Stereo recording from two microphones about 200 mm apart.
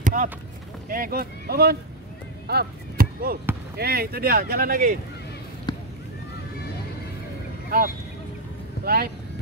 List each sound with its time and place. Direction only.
0.0 s chop: 40° right (ahead or behind)
0.8 s speech: 45° right (ahead or behind)
2.4 s chop: 50° right (ahead or behind)
3.7 s speech: 50° right (ahead or behind)
5.7 s a sound: 20° left (ahead or behind)
8.8 s speech: 50° right (ahead or behind)